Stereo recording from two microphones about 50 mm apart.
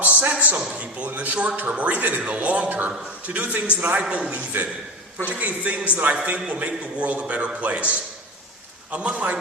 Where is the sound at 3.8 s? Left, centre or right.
Right.